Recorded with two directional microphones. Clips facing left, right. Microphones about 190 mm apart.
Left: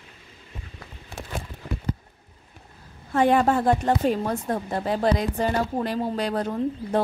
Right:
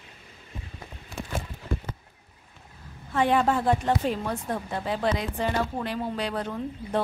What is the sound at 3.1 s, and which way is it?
A woman's voice, 45° left (ahead or behind).